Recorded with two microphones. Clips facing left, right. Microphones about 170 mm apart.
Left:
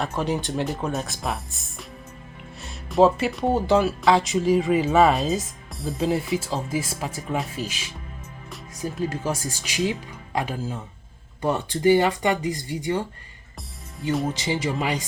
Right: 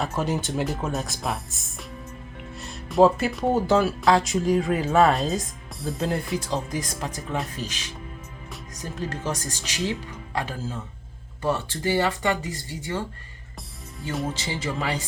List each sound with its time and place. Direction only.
0.0 s speech: centre (ahead or behind); by 13.1 s 15° left (ahead or behind)
14.3 s speech: 15° left (ahead or behind)